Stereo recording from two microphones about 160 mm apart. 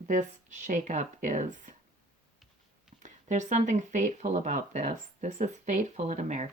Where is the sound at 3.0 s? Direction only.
50° right (ahead or behind).